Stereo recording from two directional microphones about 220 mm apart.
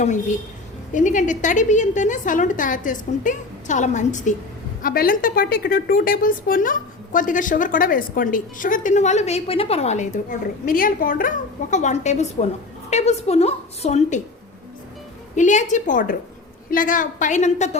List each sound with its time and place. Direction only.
0.0 s a woman's voice: 35° left (ahead or behind)
15.4 s a woman's voice: 35° left (ahead or behind)